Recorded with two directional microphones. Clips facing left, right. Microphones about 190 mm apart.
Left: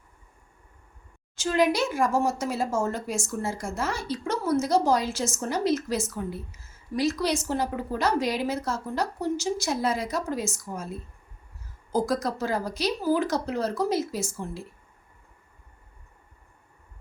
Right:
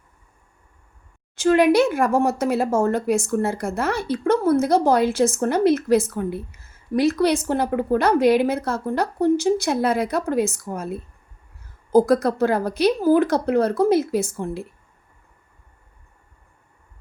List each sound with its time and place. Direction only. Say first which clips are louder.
1.4 s speech: right 8 dB; 60° right (ahead or behind)